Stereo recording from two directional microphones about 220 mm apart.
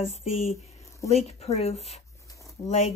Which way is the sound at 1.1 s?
30° left (ahead or behind).